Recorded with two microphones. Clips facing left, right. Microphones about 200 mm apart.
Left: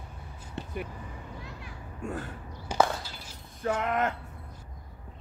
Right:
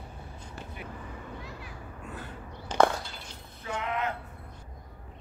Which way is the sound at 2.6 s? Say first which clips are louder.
Right 2 dB; 5° left (ahead or behind).